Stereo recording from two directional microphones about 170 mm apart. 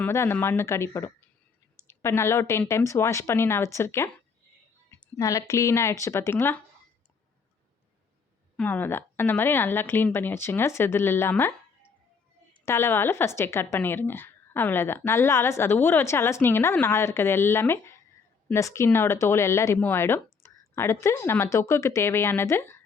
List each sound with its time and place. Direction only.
0.0 s a woman's voice: 15° left (ahead or behind)
8.5 s a woman's voice: 10° left (ahead or behind)
12.6 s a woman's voice: 15° left (ahead or behind)